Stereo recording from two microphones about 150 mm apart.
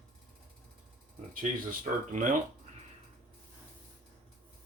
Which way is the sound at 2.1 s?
60° right (ahead or behind).